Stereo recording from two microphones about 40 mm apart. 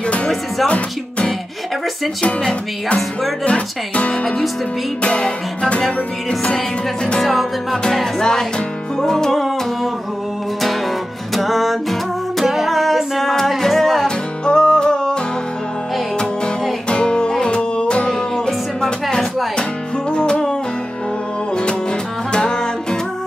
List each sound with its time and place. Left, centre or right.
0.7 s music: left
3.4 s speech: left
5.0 s music: left
7.2 s music: centre
7.8 s music: centre
11.3 s music: centre
14.0 s music: centre
16.9 s music: left
22.3 s music: left